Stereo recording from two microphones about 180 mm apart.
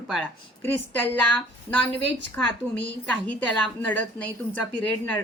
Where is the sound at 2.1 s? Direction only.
10° left (ahead or behind).